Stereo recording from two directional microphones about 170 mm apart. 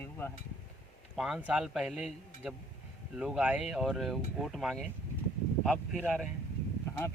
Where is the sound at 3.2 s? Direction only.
5° right (ahead or behind).